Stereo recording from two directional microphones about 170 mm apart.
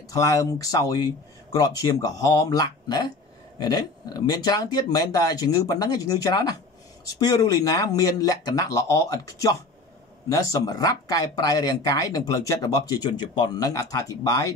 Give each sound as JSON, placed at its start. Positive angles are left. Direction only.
{"t": 0.1, "sound": "speech", "side_deg": 20}